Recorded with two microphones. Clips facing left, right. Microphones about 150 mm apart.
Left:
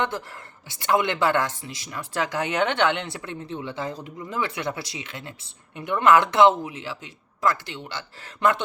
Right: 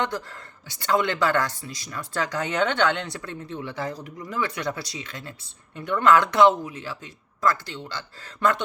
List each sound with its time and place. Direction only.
0.9 s speech: 20° left (ahead or behind)